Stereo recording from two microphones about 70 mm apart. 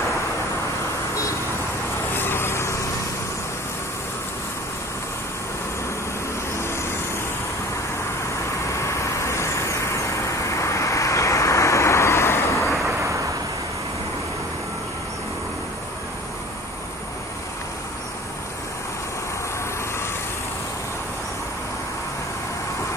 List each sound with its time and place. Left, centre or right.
2.1 s vehicle: left
6.5 s vehicle: left
8.7 s vehicle: left